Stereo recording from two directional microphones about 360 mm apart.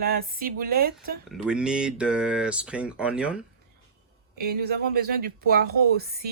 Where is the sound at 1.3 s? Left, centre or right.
Centre.